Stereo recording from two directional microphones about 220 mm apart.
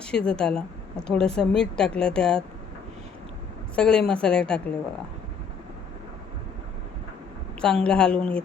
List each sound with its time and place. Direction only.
0.0 s a woman's voice: 5° left (ahead or behind)
3.8 s a woman's voice: 5° left (ahead or behind)
7.6 s a woman's voice: 5° left (ahead or behind)